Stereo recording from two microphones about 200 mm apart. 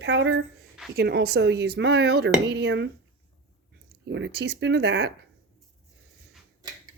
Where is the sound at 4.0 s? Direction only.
65° right (ahead or behind).